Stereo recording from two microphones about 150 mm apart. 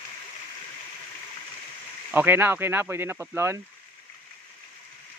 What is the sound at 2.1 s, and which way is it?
Speech, 15° right (ahead or behind).